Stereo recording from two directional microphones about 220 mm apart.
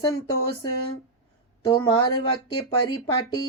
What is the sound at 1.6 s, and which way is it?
Speech, 20° left (ahead or behind).